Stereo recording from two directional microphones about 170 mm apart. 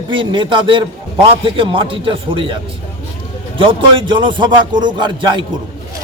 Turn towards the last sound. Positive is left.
turn(degrees=-30)  # may be behind; listen again after turning